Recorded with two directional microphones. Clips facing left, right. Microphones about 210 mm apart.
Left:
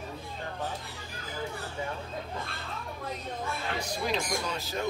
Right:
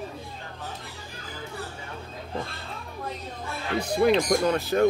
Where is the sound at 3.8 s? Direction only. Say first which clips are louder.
Right 13 dB; 60° right (ahead or behind).